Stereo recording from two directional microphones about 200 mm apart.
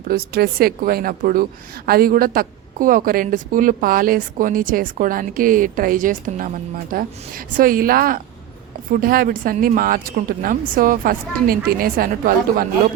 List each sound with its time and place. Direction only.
0.1 s a woman's voice: 50° right (ahead or behind)